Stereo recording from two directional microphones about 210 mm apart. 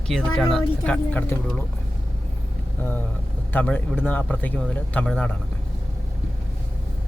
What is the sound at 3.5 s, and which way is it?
A man's voice, 5° left (ahead or behind).